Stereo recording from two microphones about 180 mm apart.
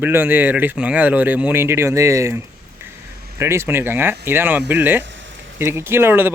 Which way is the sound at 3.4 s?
15° right (ahead or behind).